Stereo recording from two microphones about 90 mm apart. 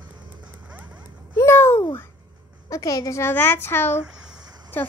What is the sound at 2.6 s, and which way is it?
Speech, 40° left (ahead or behind).